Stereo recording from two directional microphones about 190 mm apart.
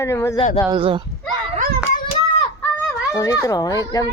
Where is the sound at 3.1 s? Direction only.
15° left (ahead or behind).